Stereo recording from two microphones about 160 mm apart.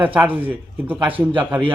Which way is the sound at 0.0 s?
10° right (ahead or behind).